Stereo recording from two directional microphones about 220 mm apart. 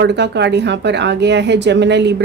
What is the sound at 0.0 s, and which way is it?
A woman's voice, 50° right (ahead or behind).